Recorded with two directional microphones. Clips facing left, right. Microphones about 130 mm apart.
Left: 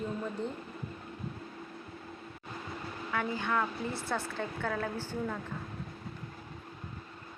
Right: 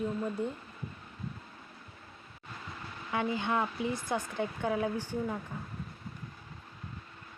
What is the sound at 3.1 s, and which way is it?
Speech, 20° right (ahead or behind).